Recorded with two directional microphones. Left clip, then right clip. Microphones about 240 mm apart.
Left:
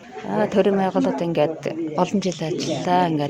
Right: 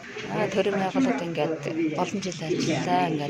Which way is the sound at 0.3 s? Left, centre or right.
Left.